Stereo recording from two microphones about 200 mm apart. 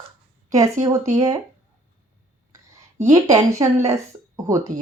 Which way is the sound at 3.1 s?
15° right (ahead or behind).